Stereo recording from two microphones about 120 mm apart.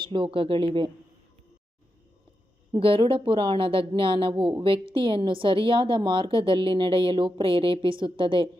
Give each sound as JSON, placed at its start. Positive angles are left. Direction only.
{"t": 0.0, "sound": "a woman's voice", "side_deg": -45}
{"t": 2.7, "sound": "a woman's voice", "side_deg": -50}